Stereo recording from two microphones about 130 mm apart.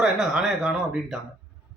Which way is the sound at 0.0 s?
5° right (ahead or behind).